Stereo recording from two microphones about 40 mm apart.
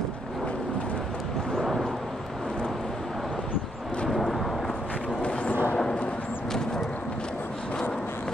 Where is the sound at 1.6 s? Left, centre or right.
Centre.